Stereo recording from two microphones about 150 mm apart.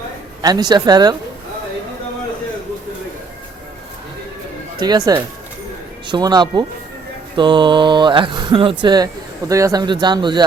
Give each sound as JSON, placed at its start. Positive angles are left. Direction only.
{"t": 0.4, "sound": "a man's voice", "side_deg": -25}
{"t": 4.8, "sound": "a man's voice", "side_deg": -25}